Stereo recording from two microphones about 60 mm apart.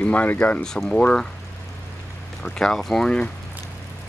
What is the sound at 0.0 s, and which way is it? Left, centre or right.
Speech, left.